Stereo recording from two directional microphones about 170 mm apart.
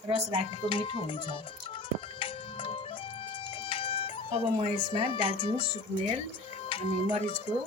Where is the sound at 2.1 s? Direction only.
30° left (ahead or behind).